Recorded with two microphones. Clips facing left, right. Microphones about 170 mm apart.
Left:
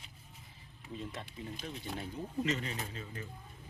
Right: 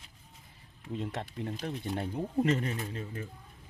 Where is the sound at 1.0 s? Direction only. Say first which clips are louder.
Right 7 dB; 70° right (ahead or behind).